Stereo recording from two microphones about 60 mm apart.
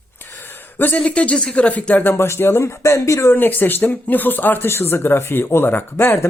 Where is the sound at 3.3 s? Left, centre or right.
Left.